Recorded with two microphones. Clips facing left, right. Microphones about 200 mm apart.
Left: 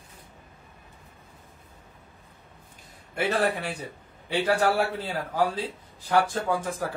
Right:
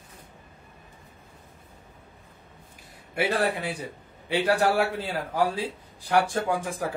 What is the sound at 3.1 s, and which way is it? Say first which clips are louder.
A man's voice: even; 10° right (ahead or behind).